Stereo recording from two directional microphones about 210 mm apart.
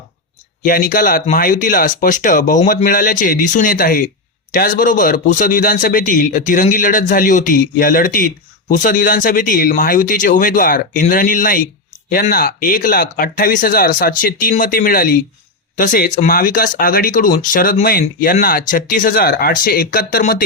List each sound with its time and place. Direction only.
0.6 s a man's voice: 40° left (ahead or behind)